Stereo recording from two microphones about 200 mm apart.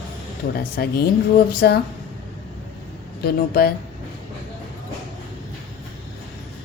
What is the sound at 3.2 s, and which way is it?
Speech, 50° left (ahead or behind).